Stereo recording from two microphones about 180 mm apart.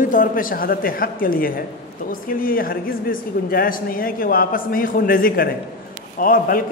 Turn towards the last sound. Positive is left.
turn(degrees=50)  # may be behind; listen again after turning